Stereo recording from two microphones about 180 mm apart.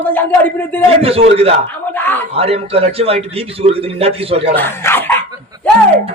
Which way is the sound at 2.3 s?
35° right (ahead or behind).